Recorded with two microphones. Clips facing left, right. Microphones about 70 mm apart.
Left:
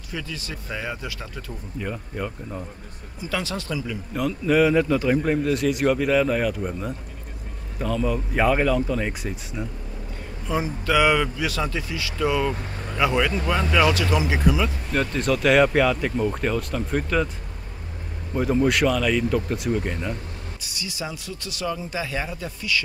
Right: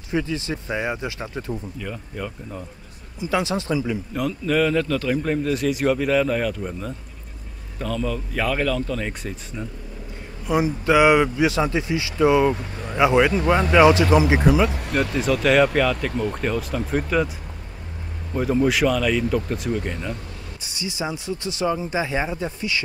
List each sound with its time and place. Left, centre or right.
0.1 s speech: right
1.8 s speech: centre
3.2 s speech: right
4.1 s a man's voice: centre
10.4 s speech: centre
15.1 s a man's voice: centre
18.3 s a man's voice: centre
20.6 s speech: right